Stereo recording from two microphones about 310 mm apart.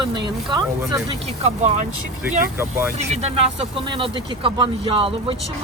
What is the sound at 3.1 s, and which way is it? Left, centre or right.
Speech, centre.